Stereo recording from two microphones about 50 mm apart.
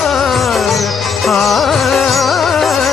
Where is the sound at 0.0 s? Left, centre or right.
Centre.